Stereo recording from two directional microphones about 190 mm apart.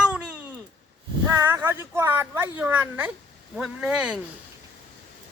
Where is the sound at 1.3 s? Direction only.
15° right (ahead or behind).